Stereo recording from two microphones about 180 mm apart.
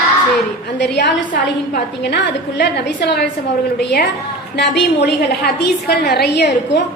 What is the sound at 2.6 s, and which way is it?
A woman's voice, 70° left (ahead or behind).